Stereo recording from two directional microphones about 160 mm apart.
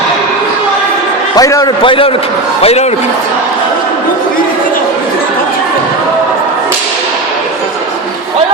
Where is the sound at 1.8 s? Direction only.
35° left (ahead or behind).